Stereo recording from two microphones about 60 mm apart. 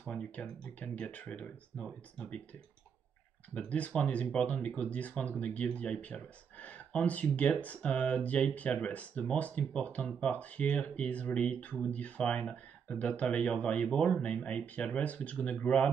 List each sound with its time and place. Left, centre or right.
0.1 s speech: left
3.5 s speech: left